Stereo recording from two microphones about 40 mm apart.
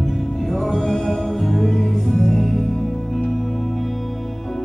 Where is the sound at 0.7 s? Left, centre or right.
Centre.